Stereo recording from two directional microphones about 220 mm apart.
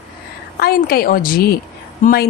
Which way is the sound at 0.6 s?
45° left (ahead or behind).